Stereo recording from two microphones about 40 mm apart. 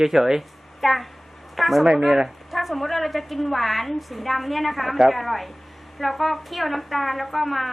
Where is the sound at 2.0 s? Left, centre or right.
Centre.